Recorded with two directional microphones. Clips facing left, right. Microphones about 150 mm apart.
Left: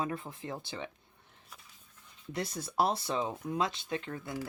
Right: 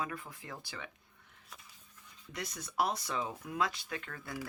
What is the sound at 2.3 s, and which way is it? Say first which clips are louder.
Speech: left 4 dB; 30° left (ahead or behind).